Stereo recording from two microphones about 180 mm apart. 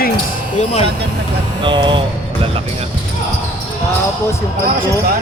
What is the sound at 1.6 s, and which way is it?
Speech, 25° right (ahead or behind).